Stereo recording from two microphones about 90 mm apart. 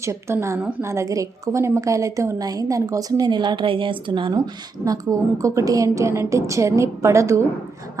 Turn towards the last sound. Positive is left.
turn(degrees=-35)  # may be behind; listen again after turning